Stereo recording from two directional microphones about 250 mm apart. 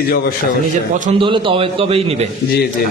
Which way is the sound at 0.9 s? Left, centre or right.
Right.